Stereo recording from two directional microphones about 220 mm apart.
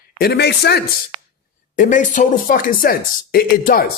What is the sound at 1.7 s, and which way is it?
Speech, 35° left (ahead or behind).